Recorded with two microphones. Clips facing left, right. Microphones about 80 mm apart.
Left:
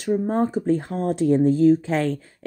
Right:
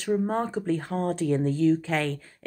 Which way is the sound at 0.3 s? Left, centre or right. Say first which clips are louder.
Left 5 dB; centre.